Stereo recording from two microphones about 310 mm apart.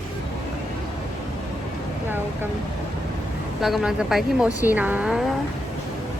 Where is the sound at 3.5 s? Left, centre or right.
Centre.